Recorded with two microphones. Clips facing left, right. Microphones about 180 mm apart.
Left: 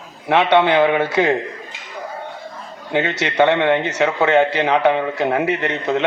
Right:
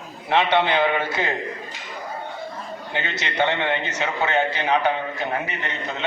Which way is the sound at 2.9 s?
90° left.